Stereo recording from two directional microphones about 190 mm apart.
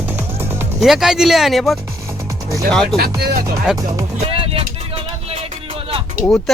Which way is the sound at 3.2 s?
55° right (ahead or behind).